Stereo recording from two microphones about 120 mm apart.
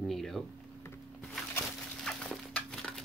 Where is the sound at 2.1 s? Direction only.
5° left (ahead or behind).